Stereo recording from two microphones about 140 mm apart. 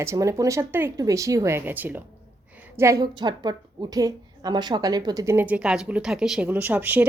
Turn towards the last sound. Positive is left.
turn(degrees=-15)  # may be behind; listen again after turning